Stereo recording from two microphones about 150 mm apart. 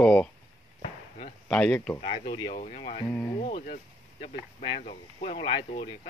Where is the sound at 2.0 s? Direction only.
45° left (ahead or behind).